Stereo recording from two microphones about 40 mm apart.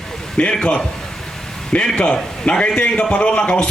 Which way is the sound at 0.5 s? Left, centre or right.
Centre.